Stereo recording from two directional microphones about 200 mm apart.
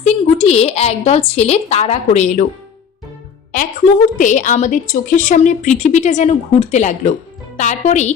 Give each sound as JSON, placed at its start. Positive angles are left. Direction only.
{"t": 0.0, "sound": "a woman's voice", "side_deg": 30}
{"t": 4.2, "sound": "a woman's voice", "side_deg": 40}